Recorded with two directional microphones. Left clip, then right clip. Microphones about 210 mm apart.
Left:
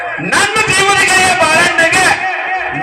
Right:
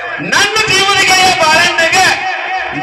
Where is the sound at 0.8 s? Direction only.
45° left (ahead or behind).